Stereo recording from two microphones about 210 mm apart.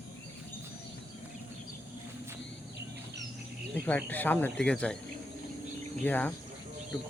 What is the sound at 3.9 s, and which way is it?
Speech, 10° left (ahead or behind).